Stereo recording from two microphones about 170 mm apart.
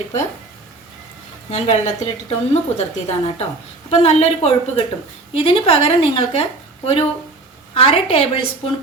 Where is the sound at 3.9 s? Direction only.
40° left (ahead or behind).